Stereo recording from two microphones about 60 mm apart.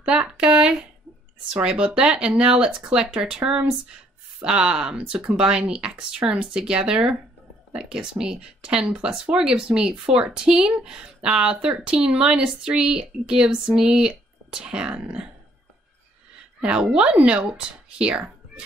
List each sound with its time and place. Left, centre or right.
0.0 s a sound: centre
1.5 s speech: centre
16.6 s speech: centre